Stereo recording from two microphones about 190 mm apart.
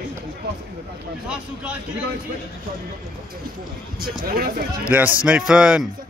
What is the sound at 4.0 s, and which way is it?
Speech, 55° right (ahead or behind).